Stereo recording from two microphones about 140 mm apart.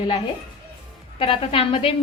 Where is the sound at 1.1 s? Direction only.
40° left (ahead or behind).